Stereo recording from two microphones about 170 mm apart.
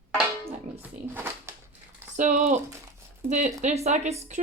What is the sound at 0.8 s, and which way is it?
Speech, 10° right (ahead or behind).